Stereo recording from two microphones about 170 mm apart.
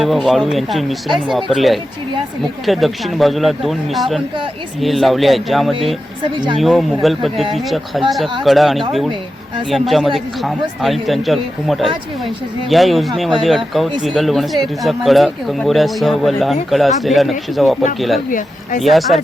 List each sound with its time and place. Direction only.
0.0 s speech: centre (ahead or behind)
6.3 s speech: 25° right (ahead or behind)
6.6 s speech: centre (ahead or behind)
18.3 s speech: 50° left (ahead or behind)
18.8 s speech: centre (ahead or behind)